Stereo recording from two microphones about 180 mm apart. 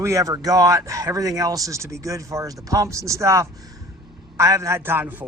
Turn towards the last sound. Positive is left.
turn(degrees=-10)  # may be behind; listen again after turning